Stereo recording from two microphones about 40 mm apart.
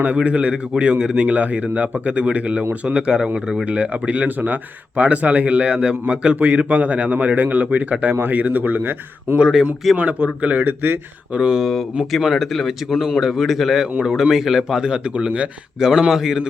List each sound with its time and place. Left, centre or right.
0.0 s a man's voice: right; by 3.7 s centre
3.7 s a man's voice: right
5.7 s speech: right
6.4 s a man's voice: right
10.0 s a man's voice: right
11.3 s speech: centre
11.6 s a man's voice: centre
14.8 s speech: right
15.8 s a man's voice: centre